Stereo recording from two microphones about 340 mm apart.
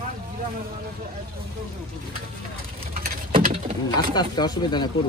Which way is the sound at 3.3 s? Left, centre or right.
Centre.